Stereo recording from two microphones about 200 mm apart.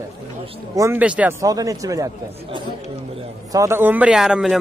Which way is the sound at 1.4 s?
15° right (ahead or behind).